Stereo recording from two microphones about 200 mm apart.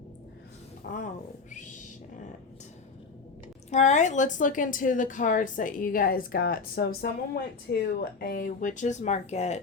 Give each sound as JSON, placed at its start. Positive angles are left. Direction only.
{"t": 0.9, "sound": "speech", "side_deg": 40}
{"t": 3.7, "sound": "a woman's voice", "side_deg": 35}